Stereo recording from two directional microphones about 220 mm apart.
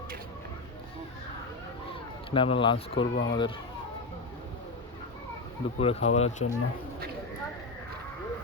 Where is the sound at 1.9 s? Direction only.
25° left (ahead or behind).